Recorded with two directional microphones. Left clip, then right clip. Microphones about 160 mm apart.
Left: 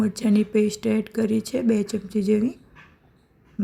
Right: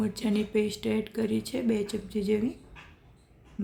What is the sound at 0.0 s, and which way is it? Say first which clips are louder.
Speech: left 7 dB; 35° left (ahead or behind).